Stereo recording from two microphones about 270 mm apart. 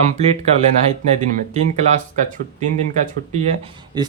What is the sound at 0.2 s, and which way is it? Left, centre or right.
Speech, right.